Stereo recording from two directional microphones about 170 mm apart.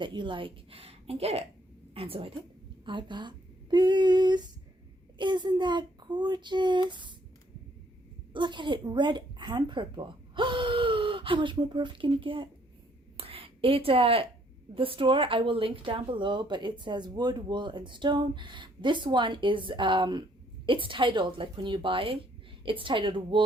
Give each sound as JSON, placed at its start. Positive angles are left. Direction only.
{"t": 0.0, "sound": "a woman's voice", "side_deg": -30}
{"t": 8.3, "sound": "a woman's voice", "side_deg": -25}
{"t": 13.1, "sound": "a sound", "side_deg": -35}
{"t": 14.8, "sound": "speech", "side_deg": -30}